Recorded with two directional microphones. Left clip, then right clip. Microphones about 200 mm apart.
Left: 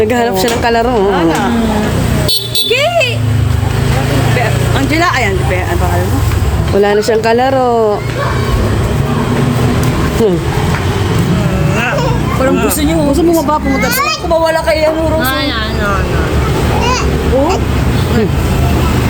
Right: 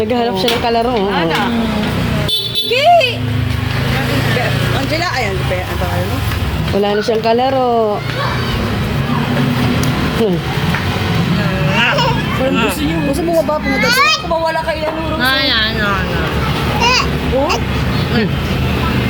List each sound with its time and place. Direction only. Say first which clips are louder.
0.1 s a woman's voice: left 3 dB; centre (ahead or behind)
2.7 s a sound: right 3 dB; 50° left (ahead or behind)
4.9 s speech: left 8 dB; 55° left (ahead or behind)
6.8 s a woman's voice: left 3 dB; centre (ahead or behind)
11.8 s music: right 2 dB; 10° left (ahead or behind)
13.8 s a woman's voice: right 2 dB; centre (ahead or behind)
15.2 s a woman's voice: right 1 dB; centre (ahead or behind)